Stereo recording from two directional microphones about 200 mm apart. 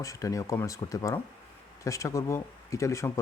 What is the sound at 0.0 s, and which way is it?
Speech, 15° left (ahead or behind).